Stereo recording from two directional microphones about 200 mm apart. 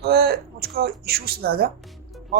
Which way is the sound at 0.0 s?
50° right (ahead or behind).